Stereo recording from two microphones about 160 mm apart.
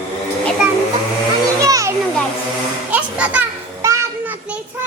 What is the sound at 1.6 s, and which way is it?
Children playing, 20° right (ahead or behind).